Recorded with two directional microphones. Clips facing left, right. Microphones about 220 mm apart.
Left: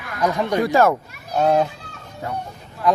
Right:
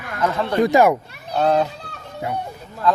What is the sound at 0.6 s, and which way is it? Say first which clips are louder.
Speech: right 3 dB; 15° right (ahead or behind).